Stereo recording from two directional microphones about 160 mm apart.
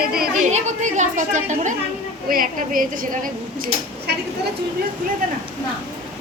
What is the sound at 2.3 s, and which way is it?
A woman's voice, 60° right (ahead or behind).